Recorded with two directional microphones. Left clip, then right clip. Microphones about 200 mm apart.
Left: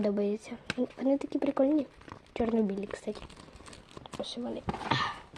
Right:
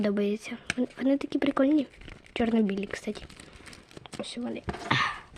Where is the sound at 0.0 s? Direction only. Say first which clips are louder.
Right 2 dB; 25° right (ahead or behind).